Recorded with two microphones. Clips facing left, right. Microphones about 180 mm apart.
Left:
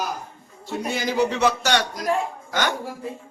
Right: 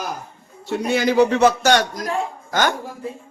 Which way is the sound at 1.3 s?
45° right (ahead or behind).